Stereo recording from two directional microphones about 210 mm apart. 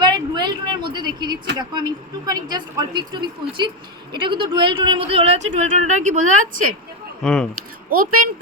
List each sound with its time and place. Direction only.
0.0 s a sound: 20° right (ahead or behind)
1.5 s speech: 20° right (ahead or behind); by 6.7 s 40° right (ahead or behind)
7.2 s speech: centre (ahead or behind)
7.9 s speech: 40° right (ahead or behind)